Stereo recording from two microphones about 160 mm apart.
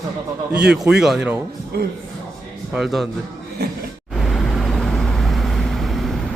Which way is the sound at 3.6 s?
90° right.